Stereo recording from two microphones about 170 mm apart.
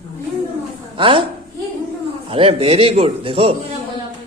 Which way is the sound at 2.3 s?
35° right (ahead or behind).